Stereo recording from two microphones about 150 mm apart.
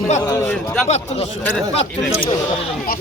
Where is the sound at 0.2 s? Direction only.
20° left (ahead or behind).